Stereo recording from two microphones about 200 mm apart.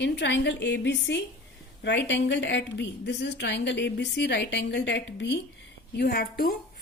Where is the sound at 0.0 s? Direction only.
60° left (ahead or behind).